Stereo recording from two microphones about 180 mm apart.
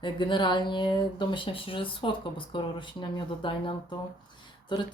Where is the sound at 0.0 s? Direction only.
25° left (ahead or behind).